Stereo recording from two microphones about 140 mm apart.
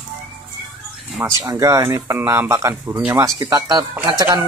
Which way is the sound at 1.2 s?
25° right (ahead or behind).